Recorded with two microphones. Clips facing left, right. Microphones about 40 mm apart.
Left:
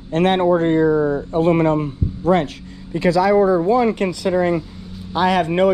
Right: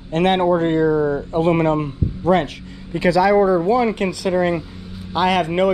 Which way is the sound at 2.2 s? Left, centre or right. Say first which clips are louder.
Even; right.